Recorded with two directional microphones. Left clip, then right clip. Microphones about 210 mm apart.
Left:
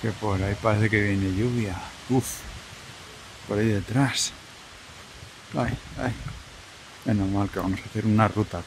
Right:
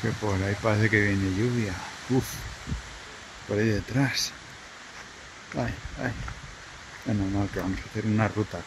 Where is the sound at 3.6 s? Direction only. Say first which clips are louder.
Left 2 dB; 15° left (ahead or behind).